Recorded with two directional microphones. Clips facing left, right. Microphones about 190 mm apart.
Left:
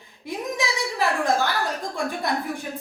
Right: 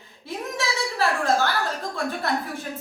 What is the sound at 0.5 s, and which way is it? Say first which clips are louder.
Speech: right 1 dB; 15° left (ahead or behind).